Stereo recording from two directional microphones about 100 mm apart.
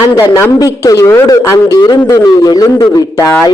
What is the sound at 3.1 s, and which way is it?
Speech, 25° left (ahead or behind).